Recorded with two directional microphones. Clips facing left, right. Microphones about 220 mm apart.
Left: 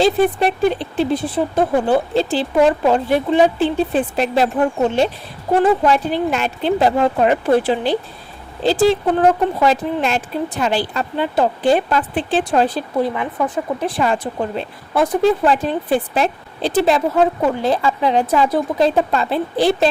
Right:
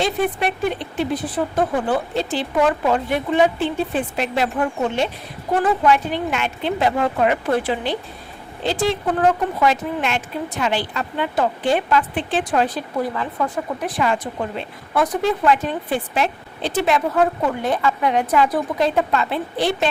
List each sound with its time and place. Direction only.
0.0 s speech: 30° left (ahead or behind)
5.8 s speech: 35° left (ahead or behind)